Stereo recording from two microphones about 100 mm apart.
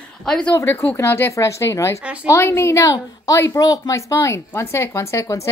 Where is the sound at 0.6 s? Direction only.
20° left (ahead or behind).